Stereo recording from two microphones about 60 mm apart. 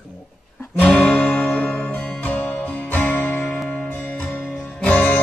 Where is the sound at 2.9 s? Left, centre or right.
Left.